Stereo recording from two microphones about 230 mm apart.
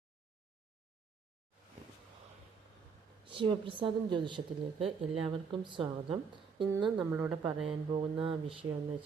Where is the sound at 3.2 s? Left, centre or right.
Right.